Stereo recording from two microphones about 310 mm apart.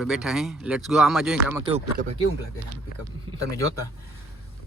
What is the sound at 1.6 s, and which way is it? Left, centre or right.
Speech, centre.